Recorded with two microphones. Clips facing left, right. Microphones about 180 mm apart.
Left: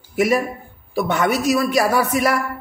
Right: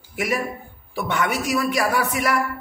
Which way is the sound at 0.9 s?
40° left (ahead or behind).